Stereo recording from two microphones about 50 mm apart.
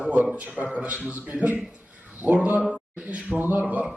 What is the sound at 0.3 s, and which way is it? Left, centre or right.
A man's voice, right.